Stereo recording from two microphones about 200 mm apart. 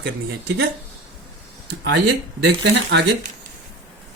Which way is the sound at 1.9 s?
60° right (ahead or behind).